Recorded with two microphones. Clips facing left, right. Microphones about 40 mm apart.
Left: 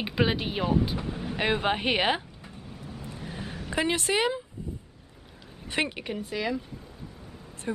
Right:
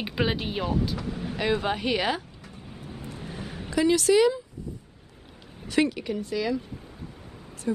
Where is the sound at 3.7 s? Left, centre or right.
Left.